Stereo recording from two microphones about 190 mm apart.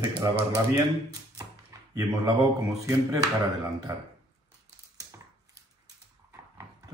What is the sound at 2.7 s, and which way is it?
Speech, 15° right (ahead or behind).